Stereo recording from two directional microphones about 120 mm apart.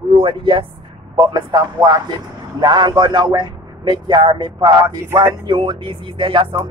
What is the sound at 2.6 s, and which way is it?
Speech, 35° right (ahead or behind).